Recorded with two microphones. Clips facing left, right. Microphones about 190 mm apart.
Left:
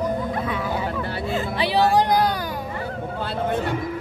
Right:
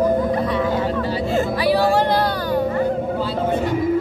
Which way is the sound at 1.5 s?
20° left (ahead or behind).